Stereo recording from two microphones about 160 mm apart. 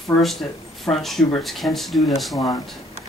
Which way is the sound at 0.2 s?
Centre (ahead or behind).